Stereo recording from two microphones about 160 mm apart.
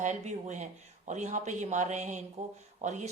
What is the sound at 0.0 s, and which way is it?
A woman's voice, 50° right (ahead or behind).